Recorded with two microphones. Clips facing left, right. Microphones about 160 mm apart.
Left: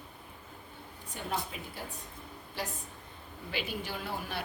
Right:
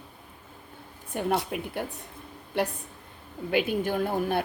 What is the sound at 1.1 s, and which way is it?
Speech, 55° right (ahead or behind).